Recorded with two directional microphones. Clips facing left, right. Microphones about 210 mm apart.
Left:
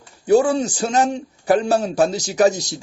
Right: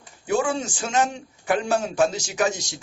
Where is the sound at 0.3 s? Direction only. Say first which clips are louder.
Left 8 dB; 35° left (ahead or behind).